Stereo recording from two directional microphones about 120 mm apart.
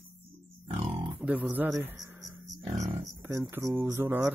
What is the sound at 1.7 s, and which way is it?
Speech, 30° right (ahead or behind).